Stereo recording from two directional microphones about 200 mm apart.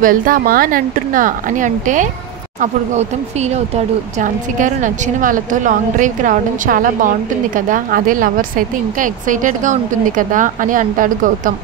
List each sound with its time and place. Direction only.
0.0 s a woman's voice: 45° right (ahead or behind)